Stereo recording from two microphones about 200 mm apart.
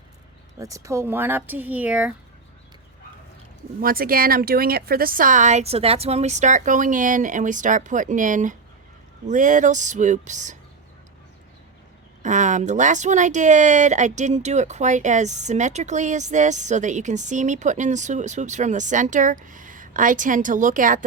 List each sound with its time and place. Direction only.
0.6 s speech: 15° right (ahead or behind)
3.8 s speech: 45° right (ahead or behind)
12.2 s speech: 40° right (ahead or behind)